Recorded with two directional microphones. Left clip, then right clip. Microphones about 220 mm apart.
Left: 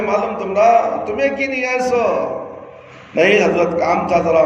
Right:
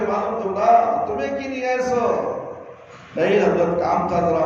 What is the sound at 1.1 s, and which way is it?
Speech, 25° left (ahead or behind).